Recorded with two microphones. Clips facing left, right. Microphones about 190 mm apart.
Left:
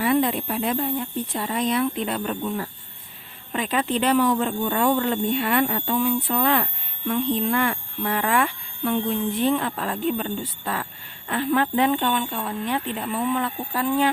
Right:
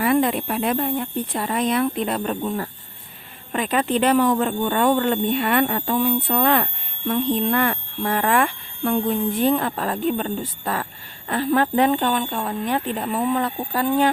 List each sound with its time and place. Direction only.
0.0 s speech: 55° right (ahead or behind); by 14.1 s 40° right (ahead or behind)